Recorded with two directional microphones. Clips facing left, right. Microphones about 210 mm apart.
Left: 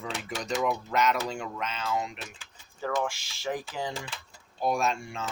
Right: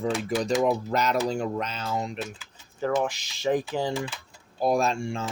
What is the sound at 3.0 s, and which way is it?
Speech, 20° right (ahead or behind).